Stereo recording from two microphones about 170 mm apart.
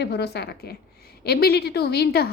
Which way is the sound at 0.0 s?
75° left (ahead or behind).